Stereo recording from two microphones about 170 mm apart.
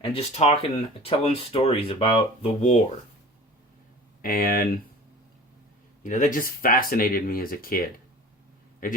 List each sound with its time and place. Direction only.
0.0 s speech: 35° left (ahead or behind)
4.2 s speech: 55° left (ahead or behind)
6.0 s speech: 50° left (ahead or behind)